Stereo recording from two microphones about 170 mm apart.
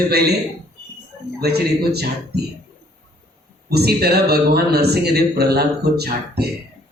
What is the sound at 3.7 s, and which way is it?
Speech, 70° right (ahead or behind).